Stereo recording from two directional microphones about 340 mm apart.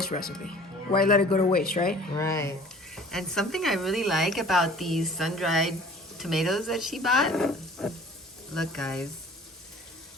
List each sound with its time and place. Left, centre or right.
0.9 s speech: left
2.1 s speech: centre